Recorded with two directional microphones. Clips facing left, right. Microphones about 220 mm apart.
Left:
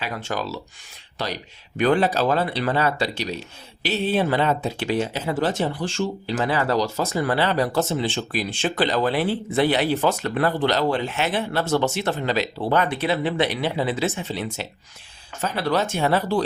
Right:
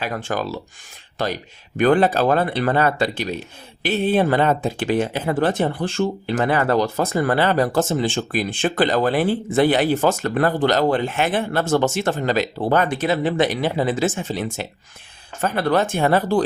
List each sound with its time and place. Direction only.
0.0 s speech: 50° right (ahead or behind)